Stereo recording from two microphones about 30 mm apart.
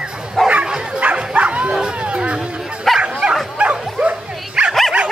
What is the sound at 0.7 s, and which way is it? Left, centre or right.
Bow-wow, right.